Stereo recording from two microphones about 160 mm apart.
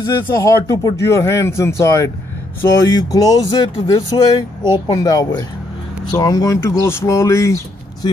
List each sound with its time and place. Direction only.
0.0 s speech: 20° left (ahead or behind)